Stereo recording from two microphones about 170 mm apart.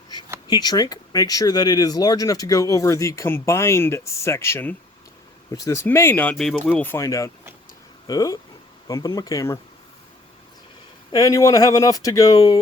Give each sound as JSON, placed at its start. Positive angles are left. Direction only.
{"t": 0.4, "sound": "speech", "side_deg": 25}
{"t": 6.3, "sound": "speech", "side_deg": 0}
{"t": 6.8, "sound": "speech", "side_deg": 15}
{"t": 11.1, "sound": "speech", "side_deg": 20}